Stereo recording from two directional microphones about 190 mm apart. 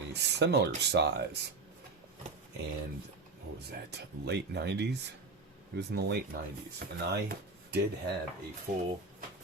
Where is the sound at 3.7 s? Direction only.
60° right (ahead or behind).